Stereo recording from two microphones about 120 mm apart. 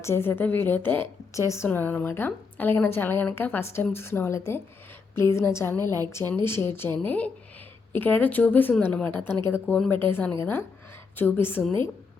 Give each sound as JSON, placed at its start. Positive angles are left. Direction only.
{"t": 0.0, "sound": "a woman's voice", "side_deg": 20}